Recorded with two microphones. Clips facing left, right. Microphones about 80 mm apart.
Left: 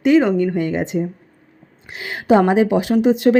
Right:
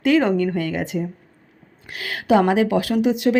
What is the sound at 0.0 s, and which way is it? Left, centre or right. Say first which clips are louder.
Speech: left 3 dB; centre.